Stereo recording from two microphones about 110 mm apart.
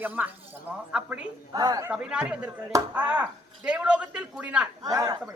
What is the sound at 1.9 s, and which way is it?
Speech, 10° right (ahead or behind).